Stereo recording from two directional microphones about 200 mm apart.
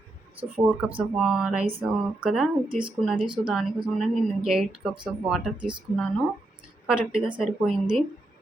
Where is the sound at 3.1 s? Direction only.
25° right (ahead or behind).